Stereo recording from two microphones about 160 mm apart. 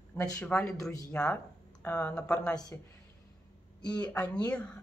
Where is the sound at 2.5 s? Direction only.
25° left (ahead or behind).